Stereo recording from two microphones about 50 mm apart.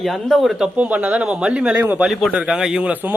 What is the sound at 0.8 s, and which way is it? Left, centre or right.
Speech, right.